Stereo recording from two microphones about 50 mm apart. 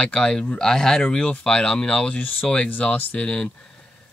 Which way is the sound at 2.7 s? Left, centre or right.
Left.